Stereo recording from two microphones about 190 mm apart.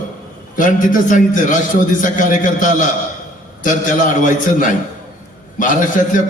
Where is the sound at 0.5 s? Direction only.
45° left (ahead or behind).